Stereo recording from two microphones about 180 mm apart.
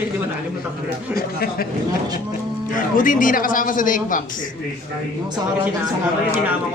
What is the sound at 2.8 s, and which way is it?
A man's voice, 50° left (ahead or behind).